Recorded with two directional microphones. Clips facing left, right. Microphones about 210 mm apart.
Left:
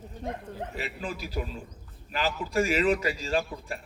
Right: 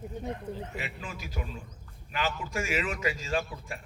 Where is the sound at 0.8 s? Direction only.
35° left (ahead or behind).